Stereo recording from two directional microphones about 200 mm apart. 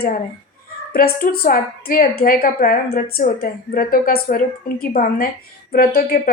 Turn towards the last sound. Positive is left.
turn(degrees=45)  # may be behind; listen again after turning